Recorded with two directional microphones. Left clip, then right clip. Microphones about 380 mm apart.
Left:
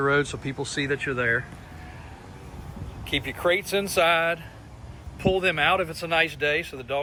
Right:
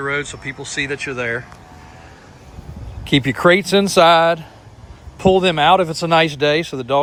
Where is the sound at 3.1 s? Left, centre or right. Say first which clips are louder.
Right 10 dB; right.